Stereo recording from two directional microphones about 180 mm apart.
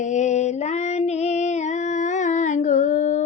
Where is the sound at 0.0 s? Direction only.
40° left (ahead or behind).